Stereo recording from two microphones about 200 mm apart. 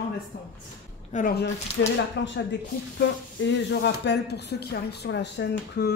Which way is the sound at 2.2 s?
60° left (ahead or behind).